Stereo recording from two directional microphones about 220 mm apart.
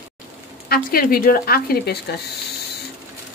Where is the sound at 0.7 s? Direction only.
40° left (ahead or behind).